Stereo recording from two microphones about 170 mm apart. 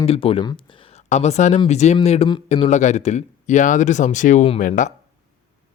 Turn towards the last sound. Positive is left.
turn(degrees=50)  # may be behind; listen again after turning